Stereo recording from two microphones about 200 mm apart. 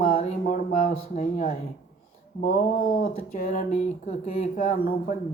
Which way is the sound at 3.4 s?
40° left (ahead or behind).